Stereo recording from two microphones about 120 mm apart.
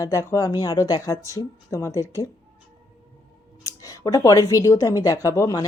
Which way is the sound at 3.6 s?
30° left (ahead or behind).